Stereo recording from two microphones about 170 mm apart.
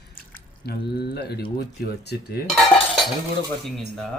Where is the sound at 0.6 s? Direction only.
70° left (ahead or behind).